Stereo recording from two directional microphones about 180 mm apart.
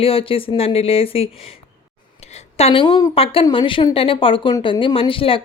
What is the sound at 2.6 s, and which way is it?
Speech, 30° left (ahead or behind).